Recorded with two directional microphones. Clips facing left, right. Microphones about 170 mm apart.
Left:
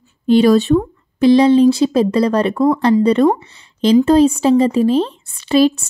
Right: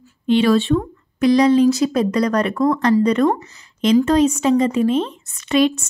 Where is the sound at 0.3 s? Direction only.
40° left (ahead or behind).